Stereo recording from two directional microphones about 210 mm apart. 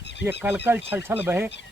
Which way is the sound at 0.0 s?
55° left (ahead or behind).